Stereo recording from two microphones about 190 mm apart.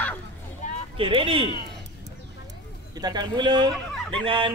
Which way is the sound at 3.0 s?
20° right (ahead or behind).